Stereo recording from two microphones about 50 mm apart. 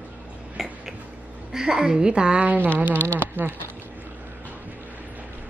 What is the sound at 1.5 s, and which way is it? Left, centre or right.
Speech, centre.